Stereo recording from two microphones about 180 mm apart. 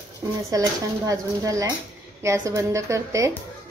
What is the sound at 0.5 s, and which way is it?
Speech, 20° right (ahead or behind).